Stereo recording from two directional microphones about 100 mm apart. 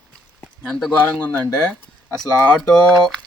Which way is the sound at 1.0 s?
20° left (ahead or behind).